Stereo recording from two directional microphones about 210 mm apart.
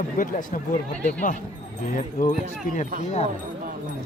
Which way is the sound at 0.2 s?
40° left (ahead or behind).